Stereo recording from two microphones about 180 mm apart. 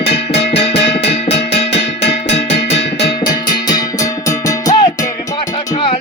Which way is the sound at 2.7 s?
65° left (ahead or behind).